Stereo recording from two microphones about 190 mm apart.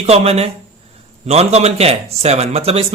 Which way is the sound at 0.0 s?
35° right (ahead or behind).